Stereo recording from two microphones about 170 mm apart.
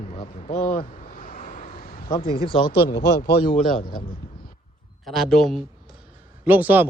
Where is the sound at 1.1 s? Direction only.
55° left (ahead or behind).